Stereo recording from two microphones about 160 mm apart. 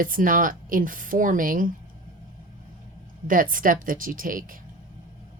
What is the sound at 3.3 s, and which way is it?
Speech, 60° right (ahead or behind).